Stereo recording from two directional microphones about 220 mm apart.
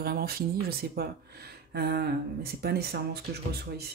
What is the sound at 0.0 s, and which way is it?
Speech, 45° right (ahead or behind).